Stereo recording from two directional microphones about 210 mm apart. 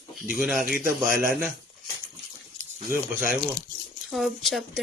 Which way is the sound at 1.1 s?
45° right (ahead or behind).